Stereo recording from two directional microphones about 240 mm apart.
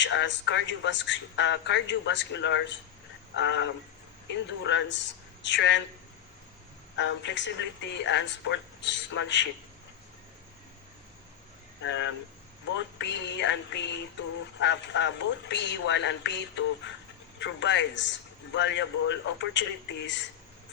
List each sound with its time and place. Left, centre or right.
0.0 s a man's voice: left
6.9 s a man's voice: left
11.8 s a man's voice: left